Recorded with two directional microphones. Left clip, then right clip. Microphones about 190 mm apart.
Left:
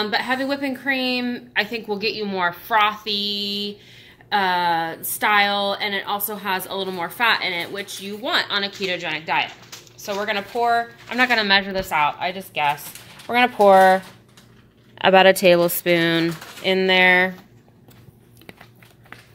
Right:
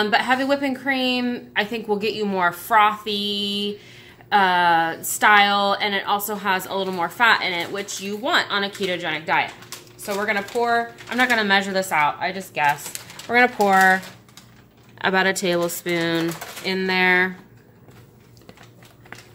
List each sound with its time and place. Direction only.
0.0 s a woman's voice: 5° right (ahead or behind)
13.3 s speech: 15° left (ahead or behind); by 17.3 s 35° left (ahead or behind)